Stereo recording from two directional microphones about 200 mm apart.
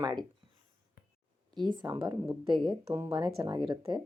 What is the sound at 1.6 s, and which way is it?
A woman's voice, 20° right (ahead or behind).